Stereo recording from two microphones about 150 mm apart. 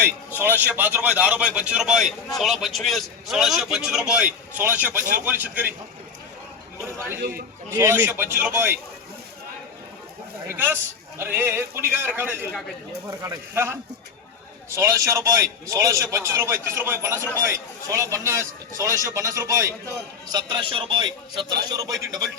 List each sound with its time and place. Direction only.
0.3 s a man's voice: 10° right (ahead or behind)
7.2 s a man's voice: 75° right (ahead or behind)
7.7 s a man's voice: 15° right (ahead or behind)
10.5 s a man's voice: 15° right (ahead or behind)
14.8 s a man's voice: 20° right (ahead or behind)
20.3 s a man's voice: 30° right (ahead or behind)